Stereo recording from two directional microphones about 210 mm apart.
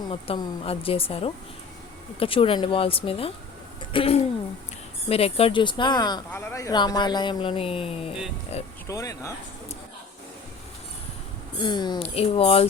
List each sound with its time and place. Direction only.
0.1 s speech: 25° left (ahead or behind)
8.9 s speech: 15° left (ahead or behind)
11.6 s speech: 20° left (ahead or behind)